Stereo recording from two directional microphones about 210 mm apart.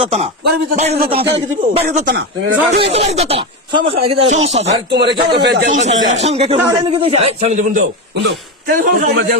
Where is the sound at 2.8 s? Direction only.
30° right (ahead or behind).